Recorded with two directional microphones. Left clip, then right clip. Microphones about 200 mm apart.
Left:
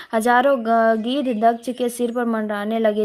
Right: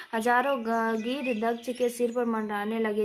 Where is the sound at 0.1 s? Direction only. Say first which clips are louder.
Left 9 dB; 35° left (ahead or behind).